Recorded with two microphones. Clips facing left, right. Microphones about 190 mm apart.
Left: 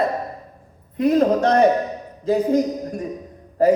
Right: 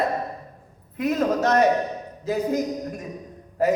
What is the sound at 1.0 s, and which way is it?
Speech, 30° left (ahead or behind).